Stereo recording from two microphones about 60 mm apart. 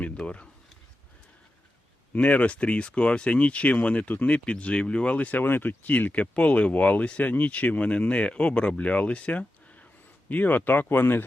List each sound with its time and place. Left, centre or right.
0.2 s speech: centre
2.1 s speech: left
4.4 s speech: centre
5.4 s speech: left